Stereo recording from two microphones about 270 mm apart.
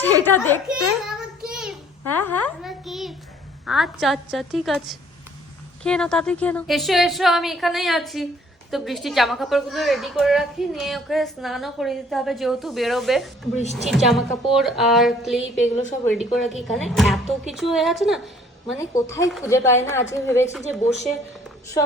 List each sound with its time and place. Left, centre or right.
0.0 s a child's voice: centre
0.7 s a sound: centre
2.0 s a child's voice: centre
15.7 s a woman's voice: left
16.1 s a woman's voice: centre
18.8 s a woman's voice: centre